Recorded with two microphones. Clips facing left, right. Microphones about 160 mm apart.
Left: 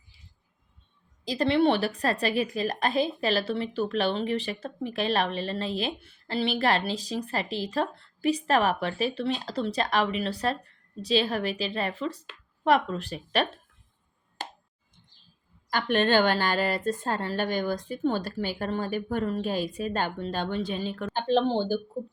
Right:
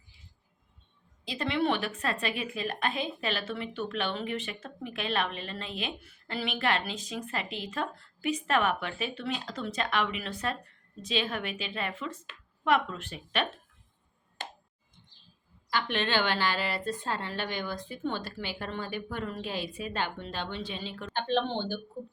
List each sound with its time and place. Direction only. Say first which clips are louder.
1.2 s a woman's voice: left 7 dB; 35° left (ahead or behind)
15.7 s a woman's voice: left 6 dB; 45° left (ahead or behind)